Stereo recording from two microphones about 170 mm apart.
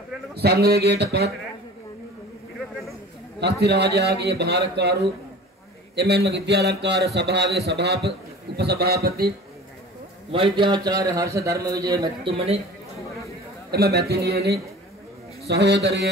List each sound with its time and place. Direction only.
0.4 s speech: 70° right (ahead or behind)
3.6 s speech: 75° right (ahead or behind)
7.2 s a man's voice: 85° right; by 9.3 s 65° right (ahead or behind)
10.3 s a man's voice: 30° right (ahead or behind)
12.3 s a man's voice: 35° right (ahead or behind)
13.7 s speech: 70° right (ahead or behind)
15.4 s a man's voice: 85° right